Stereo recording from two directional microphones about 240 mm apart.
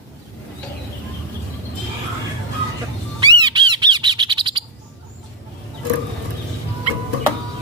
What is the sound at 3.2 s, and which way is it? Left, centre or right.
Bird, centre.